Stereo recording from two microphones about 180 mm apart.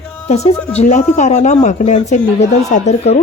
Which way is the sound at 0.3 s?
35° left (ahead or behind).